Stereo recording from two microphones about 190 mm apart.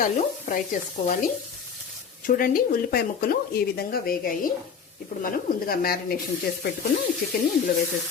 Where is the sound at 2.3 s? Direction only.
50° left (ahead or behind).